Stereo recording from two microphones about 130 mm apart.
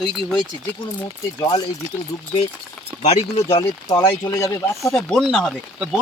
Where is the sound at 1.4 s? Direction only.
30° left (ahead or behind).